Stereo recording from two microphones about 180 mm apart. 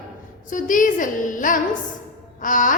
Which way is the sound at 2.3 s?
45° left (ahead or behind).